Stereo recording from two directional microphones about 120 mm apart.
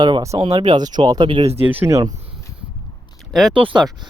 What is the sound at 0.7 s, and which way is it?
Speech, 35° right (ahead or behind).